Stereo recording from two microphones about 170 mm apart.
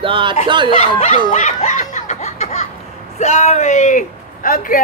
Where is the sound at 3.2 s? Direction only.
40° left (ahead or behind).